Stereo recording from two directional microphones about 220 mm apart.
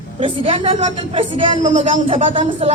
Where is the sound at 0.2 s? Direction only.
20° right (ahead or behind).